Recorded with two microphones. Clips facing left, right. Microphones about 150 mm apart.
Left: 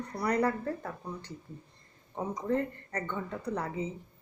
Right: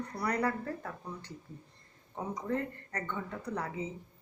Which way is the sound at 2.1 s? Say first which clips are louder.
Left 4 dB; 25° left (ahead or behind).